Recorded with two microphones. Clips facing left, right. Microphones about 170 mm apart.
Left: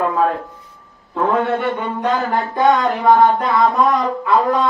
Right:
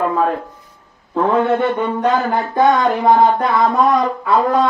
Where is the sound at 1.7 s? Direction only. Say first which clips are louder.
Right 3 dB; 20° right (ahead or behind).